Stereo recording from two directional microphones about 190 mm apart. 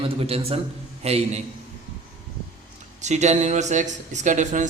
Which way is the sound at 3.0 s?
35° right (ahead or behind).